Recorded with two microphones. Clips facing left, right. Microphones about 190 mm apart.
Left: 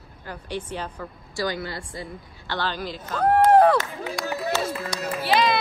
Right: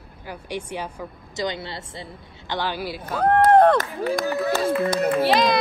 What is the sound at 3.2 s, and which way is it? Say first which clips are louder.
Speech: right 1 dB; 5° left (ahead or behind).